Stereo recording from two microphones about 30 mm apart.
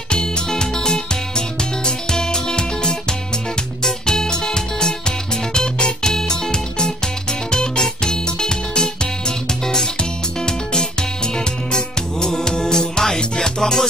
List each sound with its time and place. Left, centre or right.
0.5 s music: left